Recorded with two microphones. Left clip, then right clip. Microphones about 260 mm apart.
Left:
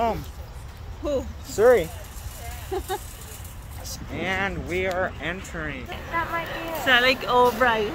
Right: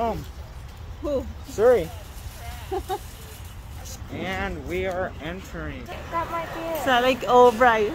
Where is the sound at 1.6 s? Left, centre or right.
Centre.